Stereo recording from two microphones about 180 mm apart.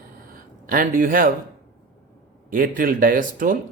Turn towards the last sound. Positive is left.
turn(degrees=-50)  # may be behind; listen again after turning